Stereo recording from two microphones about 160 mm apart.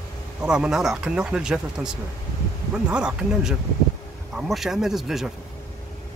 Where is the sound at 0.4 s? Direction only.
5° right (ahead or behind).